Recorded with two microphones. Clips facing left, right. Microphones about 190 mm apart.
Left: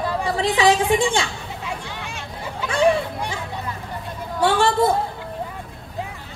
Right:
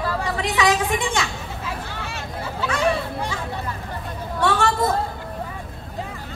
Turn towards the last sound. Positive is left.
turn(degrees=30)  # may be behind; listen again after turning